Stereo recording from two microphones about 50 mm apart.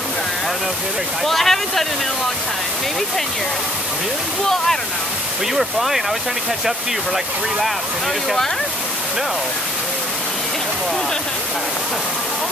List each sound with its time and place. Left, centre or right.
1.2 s speech: centre
5.5 s speech: centre